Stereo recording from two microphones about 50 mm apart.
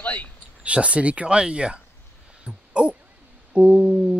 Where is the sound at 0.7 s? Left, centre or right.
Right.